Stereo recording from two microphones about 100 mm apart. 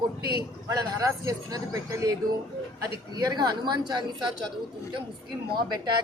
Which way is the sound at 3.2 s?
45° right (ahead or behind).